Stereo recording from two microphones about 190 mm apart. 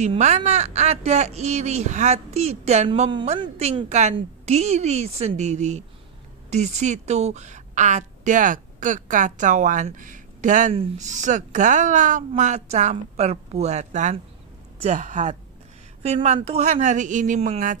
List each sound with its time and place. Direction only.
0.0 s speech: 35° right (ahead or behind)
3.1 s a woman's voice: 25° right (ahead or behind); by 17.7 s 40° right (ahead or behind)